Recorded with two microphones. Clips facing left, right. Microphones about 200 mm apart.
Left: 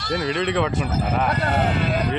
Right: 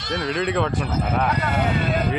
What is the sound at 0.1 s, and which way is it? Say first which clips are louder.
Speech: left 1 dB; centre (ahead or behind).